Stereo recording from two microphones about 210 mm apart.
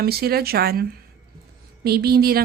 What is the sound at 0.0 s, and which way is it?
Speech, 45° right (ahead or behind).